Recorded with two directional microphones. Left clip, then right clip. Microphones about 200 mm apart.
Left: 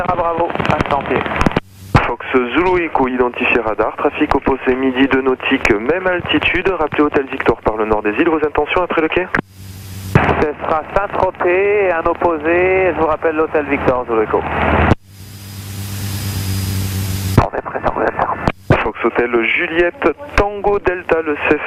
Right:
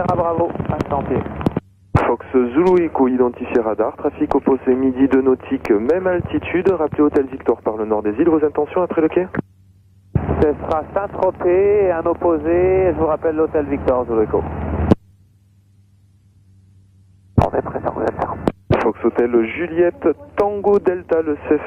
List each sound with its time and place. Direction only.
0.0 s speech: 10° left (ahead or behind)
17.5 s speech: 15° left (ahead or behind)